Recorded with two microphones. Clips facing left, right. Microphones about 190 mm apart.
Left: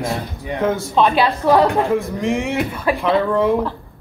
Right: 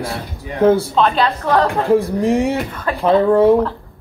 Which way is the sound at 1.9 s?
35° right (ahead or behind).